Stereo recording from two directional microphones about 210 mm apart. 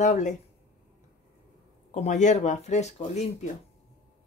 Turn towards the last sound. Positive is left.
turn(degrees=30)  # may be behind; listen again after turning